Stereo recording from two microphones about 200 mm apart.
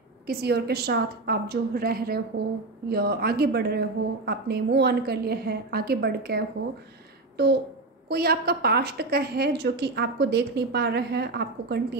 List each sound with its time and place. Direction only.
0.3 s a woman's voice: 55° right (ahead or behind)